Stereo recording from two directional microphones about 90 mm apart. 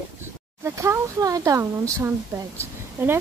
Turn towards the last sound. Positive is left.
turn(degrees=-25)  # may be behind; listen again after turning